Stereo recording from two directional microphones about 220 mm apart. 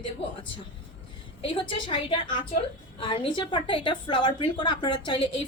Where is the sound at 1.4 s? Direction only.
25° left (ahead or behind).